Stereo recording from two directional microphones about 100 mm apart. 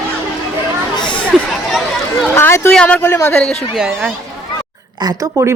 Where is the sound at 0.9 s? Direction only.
50° left (ahead or behind).